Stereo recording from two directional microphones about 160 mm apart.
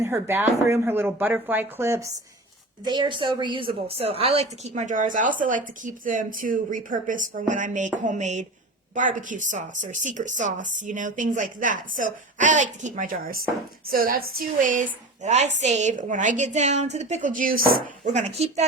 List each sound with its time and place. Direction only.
0.0 s speech: 15° right (ahead or behind)
2.8 s a woman's voice: 30° right (ahead or behind); by 14.8 s 55° right (ahead or behind)
15.2 s a woman's voice: 45° right (ahead or behind)
18.0 s a woman's voice: 45° right (ahead or behind)